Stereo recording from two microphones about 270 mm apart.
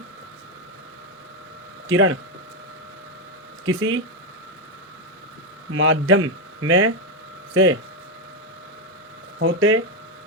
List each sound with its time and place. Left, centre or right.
1.9 s a man's voice: right
3.7 s a man's voice: right
5.7 s a man's voice: right
9.4 s a man's voice: right